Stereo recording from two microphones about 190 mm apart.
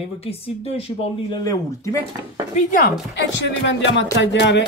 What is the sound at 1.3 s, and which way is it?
Speech, 20° left (ahead or behind).